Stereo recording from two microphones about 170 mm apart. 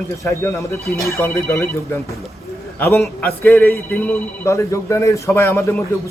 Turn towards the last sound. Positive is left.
turn(degrees=15)  # may be behind; listen again after turning